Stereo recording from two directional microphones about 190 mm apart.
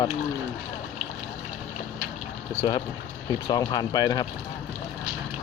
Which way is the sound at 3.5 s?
20° left (ahead or behind).